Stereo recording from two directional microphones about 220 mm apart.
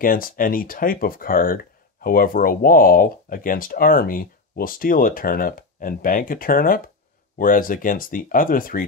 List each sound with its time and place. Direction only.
0.0 s speech: 40° left (ahead or behind)